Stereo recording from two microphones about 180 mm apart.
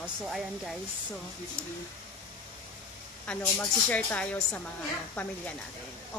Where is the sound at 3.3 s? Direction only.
10° left (ahead or behind).